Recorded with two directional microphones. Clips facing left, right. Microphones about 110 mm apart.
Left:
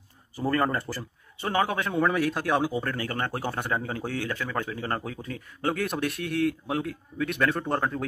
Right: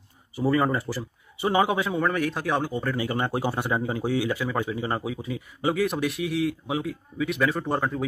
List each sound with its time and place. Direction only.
0.4 s speech: 5° right (ahead or behind)
1.4 s a man's voice: 15° right (ahead or behind)
2.0 s speech: centre (ahead or behind)
3.0 s a man's voice: 15° right (ahead or behind)